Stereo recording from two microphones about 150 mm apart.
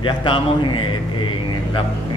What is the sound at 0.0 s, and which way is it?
A man's voice, 30° left (ahead or behind).